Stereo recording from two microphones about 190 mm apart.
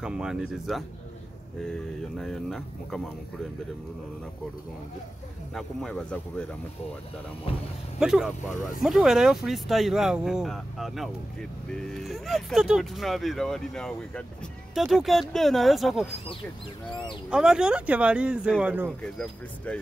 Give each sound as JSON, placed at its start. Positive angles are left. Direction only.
{"t": 0.0, "sound": "speech", "side_deg": -5}
{"t": 5.5, "sound": "speech", "side_deg": 0}
{"t": 8.0, "sound": "speech", "side_deg": -5}
{"t": 19.1, "sound": "speech", "side_deg": 5}